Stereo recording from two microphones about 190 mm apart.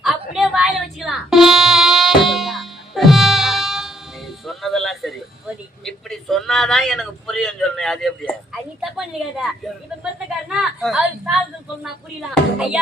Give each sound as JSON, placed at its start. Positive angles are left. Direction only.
{"t": 0.0, "sound": "music", "side_deg": 0}
{"t": 4.4, "sound": "a sound", "side_deg": 0}
{"t": 8.8, "sound": "speech", "side_deg": 0}